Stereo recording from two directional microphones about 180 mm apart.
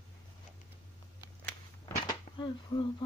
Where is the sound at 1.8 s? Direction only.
25° left (ahead or behind).